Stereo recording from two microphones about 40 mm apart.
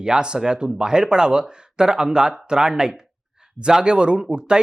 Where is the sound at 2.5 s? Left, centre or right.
Centre.